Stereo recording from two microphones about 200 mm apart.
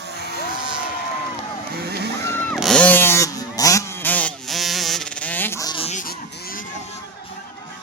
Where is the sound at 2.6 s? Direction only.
Centre (ahead or behind); by 6.6 s 45° left (ahead or behind).